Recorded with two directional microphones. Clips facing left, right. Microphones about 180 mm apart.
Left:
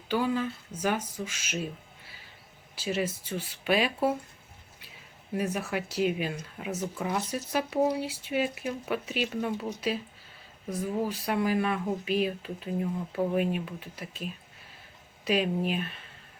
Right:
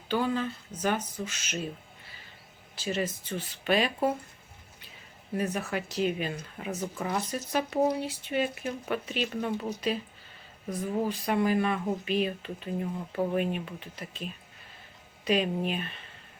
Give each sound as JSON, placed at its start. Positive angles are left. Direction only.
{"t": 0.1, "sound": "speech", "side_deg": 10}
{"t": 2.7, "sound": "speech", "side_deg": 10}
{"t": 5.3, "sound": "speech", "side_deg": 10}